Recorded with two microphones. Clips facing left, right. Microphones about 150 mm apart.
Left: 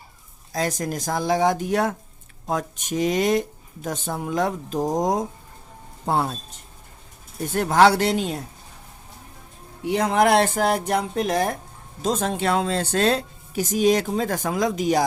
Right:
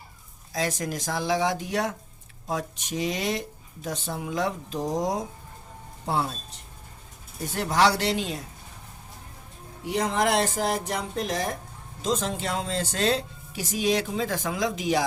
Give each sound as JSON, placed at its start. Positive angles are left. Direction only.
{"t": 0.5, "sound": "a woman's voice", "side_deg": 45}
{"t": 7.5, "sound": "a woman's voice", "side_deg": 50}
{"t": 9.8, "sound": "a woman's voice", "side_deg": 60}